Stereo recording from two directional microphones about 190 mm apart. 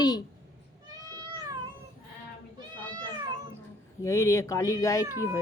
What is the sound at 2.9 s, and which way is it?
Cat, 25° right (ahead or behind).